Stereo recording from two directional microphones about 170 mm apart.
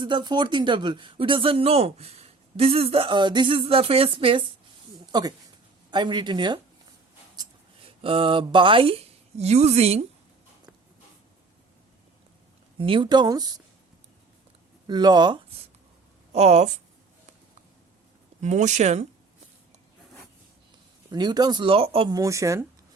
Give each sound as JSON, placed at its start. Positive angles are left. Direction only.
{"t": 0.0, "sound": "speech", "side_deg": -25}
{"t": 8.0, "sound": "speech", "side_deg": -30}
{"t": 12.8, "sound": "speech", "side_deg": -30}
{"t": 14.8, "sound": "speech", "side_deg": -25}
{"t": 16.3, "sound": "speech", "side_deg": -40}
{"t": 18.3, "sound": "speech", "side_deg": -45}
{"t": 21.1, "sound": "speech", "side_deg": -25}
{"t": 22.1, "sound": "speech", "side_deg": -20}